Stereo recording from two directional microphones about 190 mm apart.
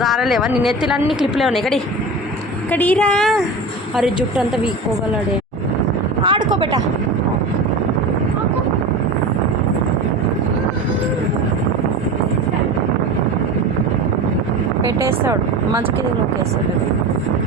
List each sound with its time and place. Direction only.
0.0 s a woman's voice: centre (ahead or behind)
6.2 s speech: 25° right (ahead or behind)
14.9 s speech: 15° right (ahead or behind)